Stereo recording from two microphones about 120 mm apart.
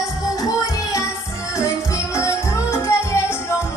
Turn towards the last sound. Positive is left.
turn(degrees=20)  # may be behind; listen again after turning